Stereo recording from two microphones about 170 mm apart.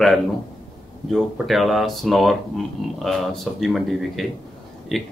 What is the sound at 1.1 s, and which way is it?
Speech, centre (ahead or behind).